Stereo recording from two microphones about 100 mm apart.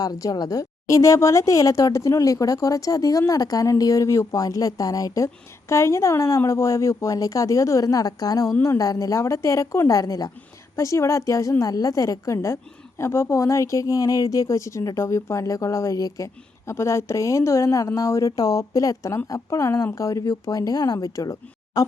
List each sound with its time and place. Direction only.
0.0 s a woman's voice: 40° left (ahead or behind)